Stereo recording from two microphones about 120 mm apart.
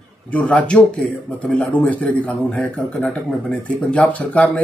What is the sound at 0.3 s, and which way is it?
Speech, 10° left (ahead or behind).